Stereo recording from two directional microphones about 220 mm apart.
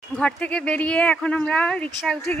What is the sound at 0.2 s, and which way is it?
Speech, 5° left (ahead or behind).